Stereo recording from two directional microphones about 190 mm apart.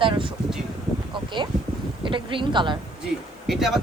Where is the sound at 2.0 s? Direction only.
25° right (ahead or behind).